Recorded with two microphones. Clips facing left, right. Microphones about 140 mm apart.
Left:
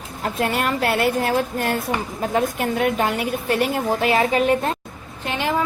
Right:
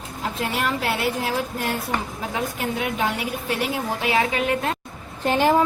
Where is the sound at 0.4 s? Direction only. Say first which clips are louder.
Left 3 dB; 55° left (ahead or behind).